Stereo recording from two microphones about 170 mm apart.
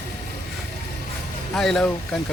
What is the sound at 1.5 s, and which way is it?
Speech, 5° left (ahead or behind).